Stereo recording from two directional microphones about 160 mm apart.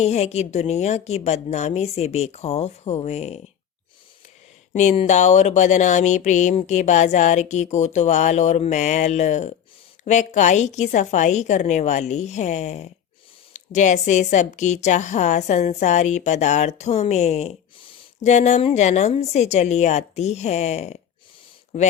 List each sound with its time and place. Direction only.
0.0 s a woman's voice: 45° left (ahead or behind)
4.7 s a woman's voice: 45° left (ahead or behind)